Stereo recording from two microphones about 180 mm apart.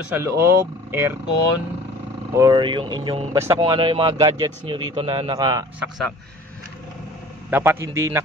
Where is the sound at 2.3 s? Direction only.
20° right (ahead or behind).